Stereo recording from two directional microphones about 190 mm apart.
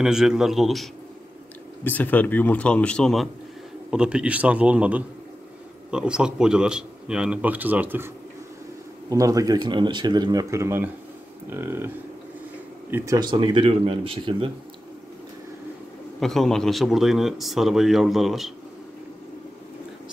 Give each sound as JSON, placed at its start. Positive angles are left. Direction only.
{"t": 0.0, "sound": "speech", "side_deg": -5}
{"t": 1.9, "sound": "a man's voice", "side_deg": 10}
{"t": 9.1, "sound": "a man's voice", "side_deg": -20}
{"t": 12.9, "sound": "speech", "side_deg": -15}
{"t": 16.2, "sound": "speech", "side_deg": 0}